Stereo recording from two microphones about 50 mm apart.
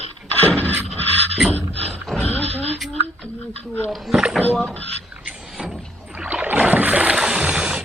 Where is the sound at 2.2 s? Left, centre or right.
Left.